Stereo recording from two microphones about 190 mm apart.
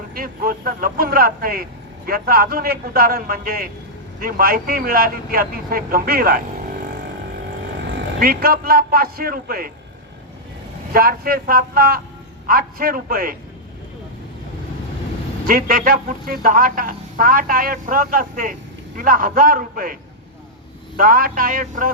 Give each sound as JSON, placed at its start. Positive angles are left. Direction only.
{"t": 0.1, "sound": "a woman's voice", "side_deg": -50}
{"t": 8.2, "sound": "a woman's voice", "side_deg": -50}
{"t": 10.9, "sound": "a woman's voice", "side_deg": -50}
{"t": 15.4, "sound": "a woman's voice", "side_deg": -45}